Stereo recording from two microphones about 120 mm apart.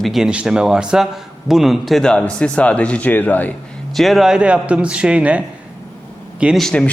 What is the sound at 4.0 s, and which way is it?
A man's voice, centre (ahead or behind).